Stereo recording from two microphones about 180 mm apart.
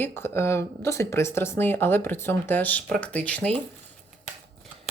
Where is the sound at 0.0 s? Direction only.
15° left (ahead or behind).